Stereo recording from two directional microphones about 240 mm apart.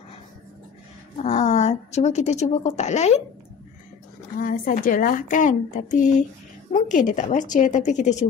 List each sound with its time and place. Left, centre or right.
1.2 s a woman's voice: left
4.4 s speech: left